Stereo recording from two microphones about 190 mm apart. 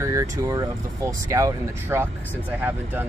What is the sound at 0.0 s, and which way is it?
Speech, 15° right (ahead or behind).